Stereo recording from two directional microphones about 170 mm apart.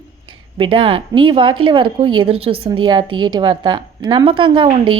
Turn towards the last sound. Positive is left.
turn(degrees=-30)  # may be behind; listen again after turning